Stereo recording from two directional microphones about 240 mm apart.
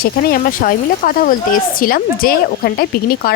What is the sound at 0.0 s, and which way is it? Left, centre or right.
A woman's voice, left.